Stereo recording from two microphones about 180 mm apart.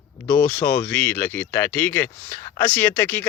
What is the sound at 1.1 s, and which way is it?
Speech, 10° left (ahead or behind).